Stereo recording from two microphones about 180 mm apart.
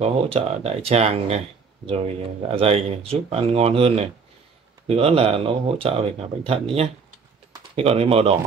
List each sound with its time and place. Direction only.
0.0 s speech: 35° right (ahead or behind)
2.4 s speech: 35° right (ahead or behind)
7.7 s speech: 35° right (ahead or behind)